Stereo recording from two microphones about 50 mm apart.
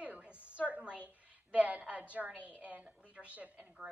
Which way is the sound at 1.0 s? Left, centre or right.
Right.